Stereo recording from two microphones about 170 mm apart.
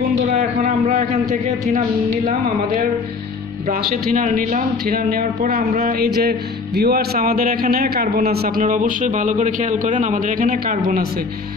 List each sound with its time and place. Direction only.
0.4 s a man's voice: 50° right (ahead or behind)